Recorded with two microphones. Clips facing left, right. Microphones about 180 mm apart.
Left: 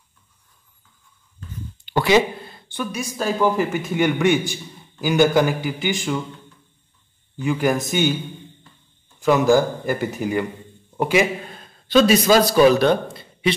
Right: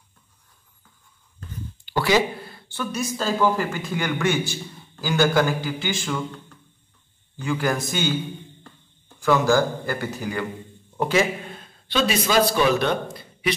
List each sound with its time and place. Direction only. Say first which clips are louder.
1.9 s speech: left 3 dB; 20° left (ahead or behind)
7.4 s speech: left 4 dB; 20° left (ahead or behind)
9.2 s a man's voice: left 3 dB; 20° left (ahead or behind)
11.9 s a man's voice: left 7 dB; 40° left (ahead or behind)